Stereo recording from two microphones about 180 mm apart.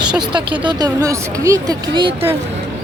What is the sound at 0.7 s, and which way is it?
Speech, 20° right (ahead or behind).